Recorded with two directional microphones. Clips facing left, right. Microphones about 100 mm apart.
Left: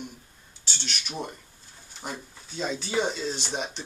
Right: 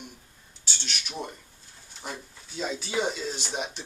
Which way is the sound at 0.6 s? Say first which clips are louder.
Left 1 dB; centre (ahead or behind).